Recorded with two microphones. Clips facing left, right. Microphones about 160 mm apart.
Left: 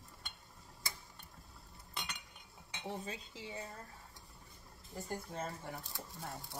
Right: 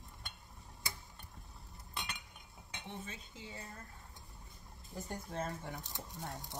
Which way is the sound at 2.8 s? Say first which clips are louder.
Left 5 dB; 35° left (ahead or behind).